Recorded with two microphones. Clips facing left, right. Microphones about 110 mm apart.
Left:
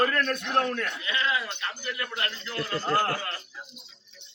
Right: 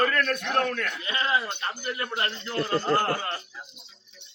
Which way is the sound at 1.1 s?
35° right (ahead or behind).